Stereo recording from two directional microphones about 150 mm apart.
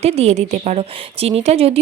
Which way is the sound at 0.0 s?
45° right (ahead or behind).